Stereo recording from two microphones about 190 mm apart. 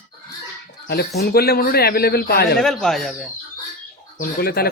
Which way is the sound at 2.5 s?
5° left (ahead or behind).